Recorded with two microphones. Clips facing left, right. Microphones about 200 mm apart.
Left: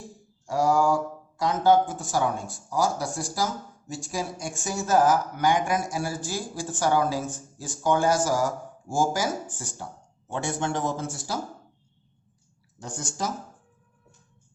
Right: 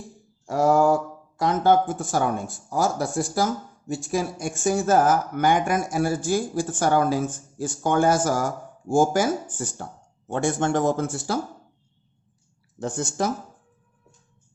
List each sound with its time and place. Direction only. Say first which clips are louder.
0.4 s speech: right 4 dB; 55° right (ahead or behind)
12.8 s speech: right 6 dB; 55° right (ahead or behind)